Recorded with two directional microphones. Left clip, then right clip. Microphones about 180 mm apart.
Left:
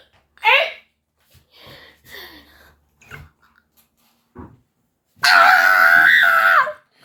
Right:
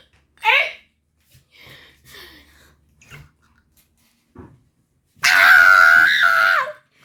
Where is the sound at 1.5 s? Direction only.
35° right (ahead or behind).